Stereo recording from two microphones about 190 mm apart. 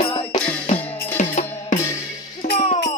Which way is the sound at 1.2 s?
40° left (ahead or behind).